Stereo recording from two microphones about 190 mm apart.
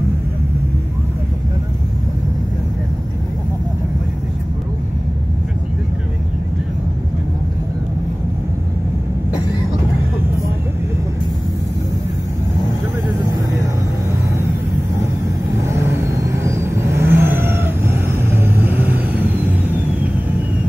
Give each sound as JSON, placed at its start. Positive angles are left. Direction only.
{"t": 15.5, "sound": "vehicle", "side_deg": -15}